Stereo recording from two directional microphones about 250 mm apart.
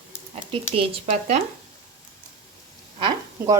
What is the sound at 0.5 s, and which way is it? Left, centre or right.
Speech, right.